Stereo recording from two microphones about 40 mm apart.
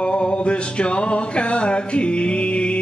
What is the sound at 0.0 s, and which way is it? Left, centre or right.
Music, left.